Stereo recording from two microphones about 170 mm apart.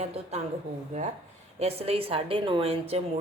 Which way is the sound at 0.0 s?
40° right (ahead or behind).